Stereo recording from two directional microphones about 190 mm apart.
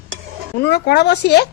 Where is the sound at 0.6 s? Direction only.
60° left (ahead or behind).